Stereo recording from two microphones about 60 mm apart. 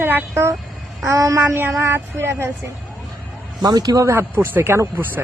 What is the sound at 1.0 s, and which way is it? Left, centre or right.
Child singing, right.